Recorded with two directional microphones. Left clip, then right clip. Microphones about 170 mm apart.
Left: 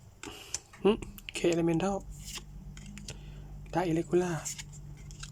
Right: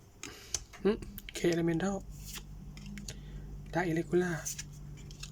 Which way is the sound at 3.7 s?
10° left (ahead or behind).